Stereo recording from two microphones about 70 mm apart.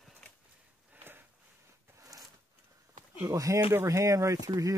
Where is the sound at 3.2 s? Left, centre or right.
Right.